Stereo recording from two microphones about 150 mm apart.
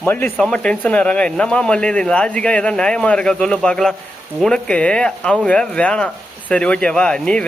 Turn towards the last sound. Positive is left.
turn(degrees=5)  # may be behind; listen again after turning